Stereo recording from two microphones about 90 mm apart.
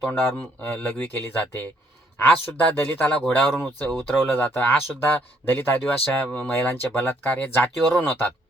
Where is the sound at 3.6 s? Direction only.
20° left (ahead or behind).